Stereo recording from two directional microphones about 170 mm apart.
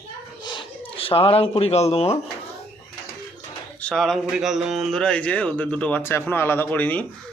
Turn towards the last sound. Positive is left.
turn(degrees=10)  # may be behind; listen again after turning